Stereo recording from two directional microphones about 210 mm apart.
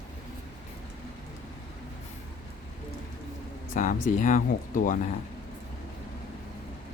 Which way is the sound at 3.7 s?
40° left (ahead or behind).